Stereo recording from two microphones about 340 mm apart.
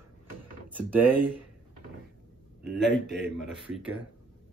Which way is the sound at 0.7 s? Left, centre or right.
Centre.